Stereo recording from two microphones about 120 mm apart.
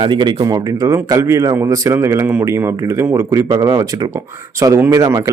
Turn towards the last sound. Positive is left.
turn(degrees=-25)  # may be behind; listen again after turning